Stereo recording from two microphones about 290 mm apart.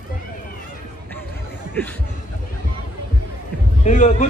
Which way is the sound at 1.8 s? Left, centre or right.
Centre.